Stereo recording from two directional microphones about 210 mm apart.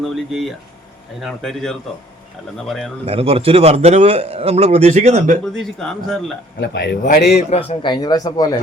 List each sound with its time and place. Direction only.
0.3 s speech: centre (ahead or behind)
3.1 s a man's voice: 25° right (ahead or behind)
5.5 s speech: centre (ahead or behind)
6.6 s speech: 55° left (ahead or behind)
7.5 s speech: 30° left (ahead or behind)